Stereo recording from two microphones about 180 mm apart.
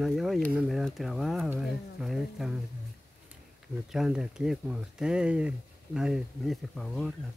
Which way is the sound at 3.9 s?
5° right (ahead or behind).